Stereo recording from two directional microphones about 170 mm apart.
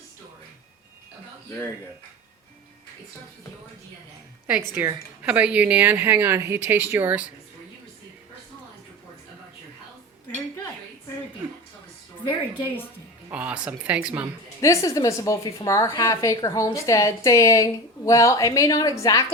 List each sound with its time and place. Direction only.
4.4 s a woman's voice: 10° right (ahead or behind)
13.3 s a woman's voice: 10° right (ahead or behind)
14.6 s a woman's voice: 20° left (ahead or behind)